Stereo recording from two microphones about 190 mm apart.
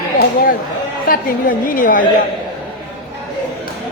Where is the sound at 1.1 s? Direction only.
45° left (ahead or behind).